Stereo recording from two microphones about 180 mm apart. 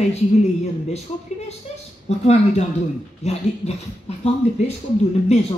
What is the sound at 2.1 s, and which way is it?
A woman's voice, 40° left (ahead or behind).